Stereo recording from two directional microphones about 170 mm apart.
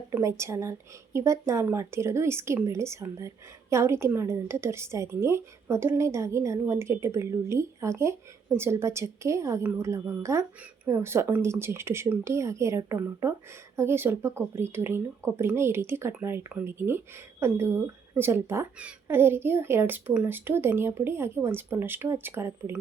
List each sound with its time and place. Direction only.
0.1 s a woman's voice: 15° right (ahead or behind)